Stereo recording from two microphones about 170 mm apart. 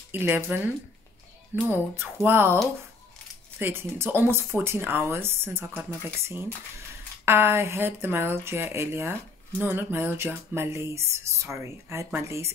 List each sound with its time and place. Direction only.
0.1 s music: 10° right (ahead or behind)